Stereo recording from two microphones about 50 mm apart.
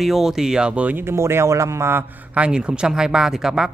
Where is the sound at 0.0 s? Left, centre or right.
Centre.